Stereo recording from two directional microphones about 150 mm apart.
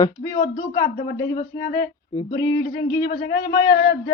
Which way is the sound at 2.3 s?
25° left (ahead or behind).